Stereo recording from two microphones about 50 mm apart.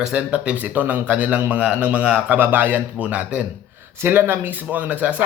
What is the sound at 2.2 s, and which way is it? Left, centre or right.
Speech, right.